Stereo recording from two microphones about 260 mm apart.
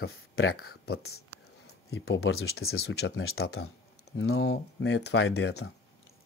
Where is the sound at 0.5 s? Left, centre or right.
Left.